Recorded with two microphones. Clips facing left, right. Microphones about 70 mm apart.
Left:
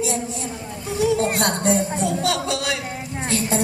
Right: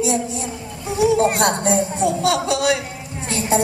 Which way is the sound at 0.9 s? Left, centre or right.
Centre.